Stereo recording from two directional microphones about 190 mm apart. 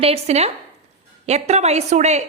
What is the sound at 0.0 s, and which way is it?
A woman's voice, 35° right (ahead or behind).